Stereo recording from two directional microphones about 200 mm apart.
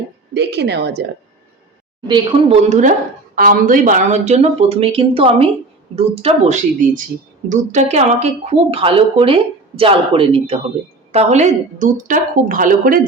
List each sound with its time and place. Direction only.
0.3 s a woman's voice: 55° right (ahead or behind)
2.0 s a woman's voice: 25° right (ahead or behind); by 13.0 s 45° right (ahead or behind)